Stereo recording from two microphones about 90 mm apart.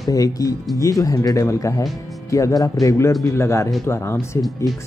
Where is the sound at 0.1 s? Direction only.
40° left (ahead or behind).